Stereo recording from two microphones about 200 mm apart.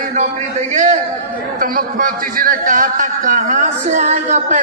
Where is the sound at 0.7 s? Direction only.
35° right (ahead or behind).